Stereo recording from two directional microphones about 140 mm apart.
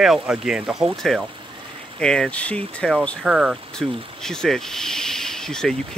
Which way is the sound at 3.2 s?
5° right (ahead or behind).